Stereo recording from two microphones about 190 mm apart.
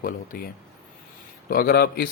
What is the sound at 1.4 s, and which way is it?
Speech, 50° left (ahead or behind).